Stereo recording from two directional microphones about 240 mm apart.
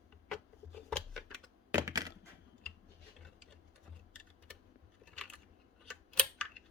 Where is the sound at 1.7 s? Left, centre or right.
Centre.